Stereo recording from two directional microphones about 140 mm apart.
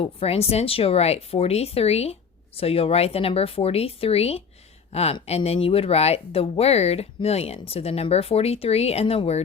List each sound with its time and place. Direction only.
0.0 s speech: 45° left (ahead or behind)